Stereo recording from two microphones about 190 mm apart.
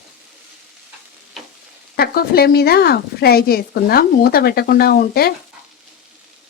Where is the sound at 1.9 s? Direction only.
55° left (ahead or behind).